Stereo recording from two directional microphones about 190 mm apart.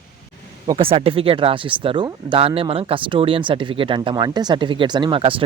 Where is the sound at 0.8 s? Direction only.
30° right (ahead or behind).